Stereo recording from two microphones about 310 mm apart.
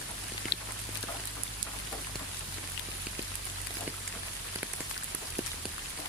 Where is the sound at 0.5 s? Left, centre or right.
Left.